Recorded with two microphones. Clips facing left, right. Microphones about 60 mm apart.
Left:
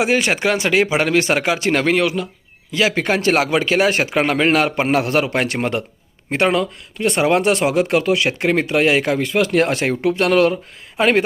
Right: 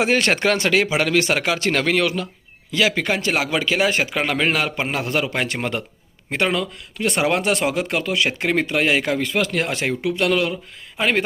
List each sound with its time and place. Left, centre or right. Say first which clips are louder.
0.0 s a man's voice: left 1 dB; centre; by 6.7 s left
7.0 s a man's voice: left 4 dB; centre
9.5 s speech: left 6 dB; left
10.9 s speech: left 5 dB; centre